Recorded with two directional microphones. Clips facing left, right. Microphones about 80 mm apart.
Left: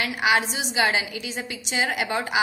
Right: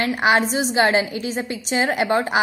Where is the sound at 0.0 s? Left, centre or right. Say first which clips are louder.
Right 4 dB; right.